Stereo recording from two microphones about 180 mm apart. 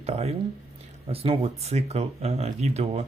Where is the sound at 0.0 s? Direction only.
35° right (ahead or behind).